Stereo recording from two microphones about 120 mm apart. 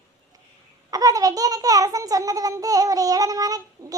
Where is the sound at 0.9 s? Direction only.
30° right (ahead or behind).